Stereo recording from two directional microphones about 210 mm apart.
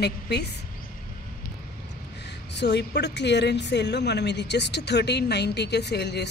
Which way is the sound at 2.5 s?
55° left (ahead or behind).